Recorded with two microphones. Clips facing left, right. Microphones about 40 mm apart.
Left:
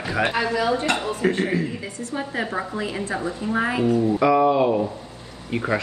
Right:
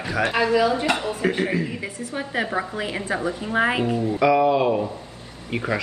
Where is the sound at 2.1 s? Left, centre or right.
Right.